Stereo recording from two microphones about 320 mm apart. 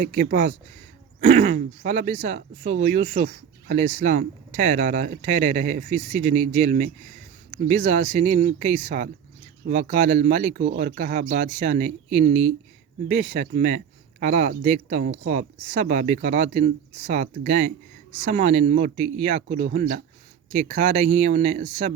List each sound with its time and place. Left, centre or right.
0.0 s speech: right